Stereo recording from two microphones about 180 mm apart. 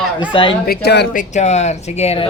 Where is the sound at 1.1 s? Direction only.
40° left (ahead or behind).